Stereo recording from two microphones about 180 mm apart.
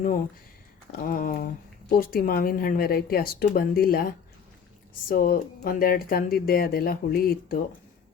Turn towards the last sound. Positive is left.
turn(degrees=55)  # may be behind; listen again after turning